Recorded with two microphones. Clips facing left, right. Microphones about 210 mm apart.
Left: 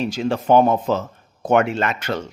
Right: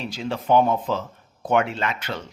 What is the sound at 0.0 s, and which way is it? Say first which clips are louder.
Speech: left 7 dB; 45° left (ahead or behind).